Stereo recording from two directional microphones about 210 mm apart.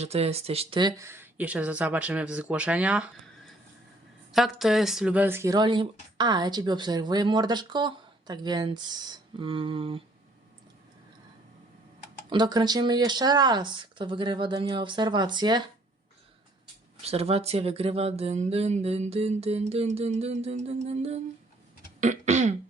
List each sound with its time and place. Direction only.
0.0 s speech: 30° right (ahead or behind); by 3.1 s 5° right (ahead or behind)
4.3 s a woman's voice: centre (ahead or behind); by 10.0 s 25° right (ahead or behind)
12.3 s a woman's voice: 20° right (ahead or behind)
17.0 s a woman's voice: 30° right (ahead or behind)
22.0 s throat clearing: 35° right (ahead or behind)